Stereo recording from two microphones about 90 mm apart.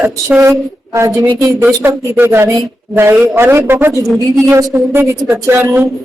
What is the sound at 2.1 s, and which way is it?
A woman's voice, 25° right (ahead or behind).